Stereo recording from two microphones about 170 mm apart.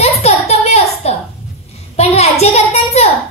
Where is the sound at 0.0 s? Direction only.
40° left (ahead or behind).